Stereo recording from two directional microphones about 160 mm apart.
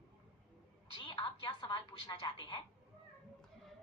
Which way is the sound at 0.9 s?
35° left (ahead or behind).